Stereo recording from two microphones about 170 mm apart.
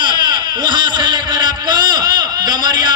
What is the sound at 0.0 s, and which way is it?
Baby cry, 25° right (ahead or behind).